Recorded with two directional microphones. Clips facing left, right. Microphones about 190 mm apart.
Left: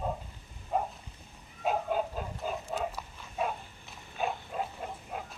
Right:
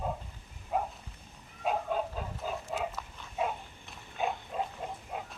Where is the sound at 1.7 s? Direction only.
5° left (ahead or behind).